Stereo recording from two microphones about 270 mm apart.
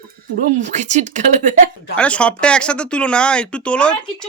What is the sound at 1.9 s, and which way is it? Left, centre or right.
Speech, centre.